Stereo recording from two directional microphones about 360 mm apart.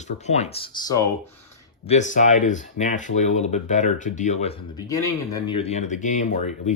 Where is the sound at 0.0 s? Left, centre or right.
Centre.